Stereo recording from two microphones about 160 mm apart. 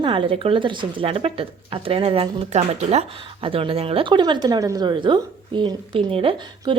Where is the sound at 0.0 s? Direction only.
35° right (ahead or behind).